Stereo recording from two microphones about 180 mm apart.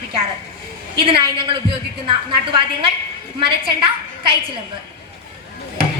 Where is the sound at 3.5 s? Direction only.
30° right (ahead or behind).